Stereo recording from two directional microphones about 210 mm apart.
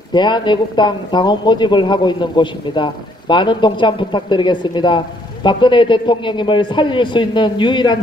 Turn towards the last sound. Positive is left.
turn(degrees=20)  # may be behind; listen again after turning